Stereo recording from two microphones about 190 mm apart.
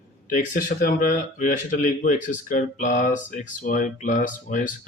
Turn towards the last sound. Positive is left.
turn(degrees=45)  # may be behind; listen again after turning